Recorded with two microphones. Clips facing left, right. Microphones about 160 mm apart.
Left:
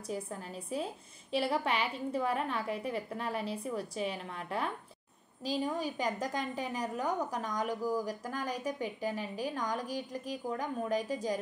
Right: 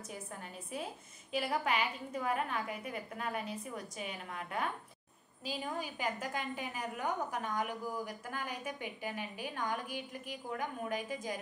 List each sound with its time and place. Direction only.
0.7 s a woman's voice: 30° left (ahead or behind)